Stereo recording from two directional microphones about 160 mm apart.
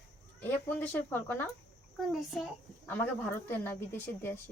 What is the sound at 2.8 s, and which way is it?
Speech, 15° left (ahead or behind).